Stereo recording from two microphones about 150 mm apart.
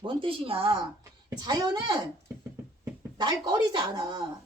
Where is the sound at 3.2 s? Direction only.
30° right (ahead or behind).